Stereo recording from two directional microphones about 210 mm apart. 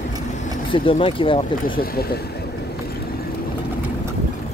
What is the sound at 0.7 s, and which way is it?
Speech, 25° left (ahead or behind).